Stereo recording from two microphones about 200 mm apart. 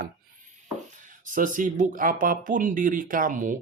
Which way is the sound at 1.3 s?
40° right (ahead or behind).